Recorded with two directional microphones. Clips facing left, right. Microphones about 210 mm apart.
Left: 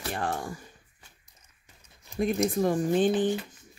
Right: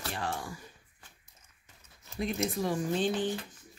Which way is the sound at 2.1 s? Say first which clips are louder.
Left 6 dB; 15° left (ahead or behind).